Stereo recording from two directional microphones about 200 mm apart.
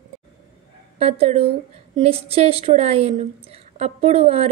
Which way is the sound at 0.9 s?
30° right (ahead or behind).